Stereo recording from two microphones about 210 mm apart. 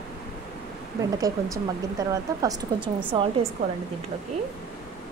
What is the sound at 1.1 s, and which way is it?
Speech, 15° right (ahead or behind).